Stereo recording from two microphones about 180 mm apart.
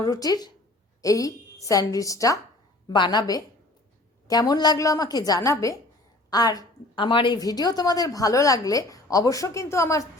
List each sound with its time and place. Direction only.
0.0 s a woman's voice: 20° left (ahead or behind)